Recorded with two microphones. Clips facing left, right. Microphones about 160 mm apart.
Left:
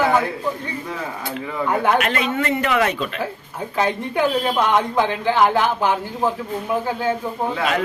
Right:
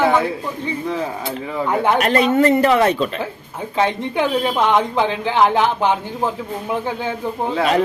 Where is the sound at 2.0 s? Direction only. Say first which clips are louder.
Right 7 dB; 40° right (ahead or behind).